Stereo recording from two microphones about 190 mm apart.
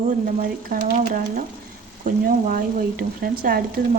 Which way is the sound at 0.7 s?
45° right (ahead or behind).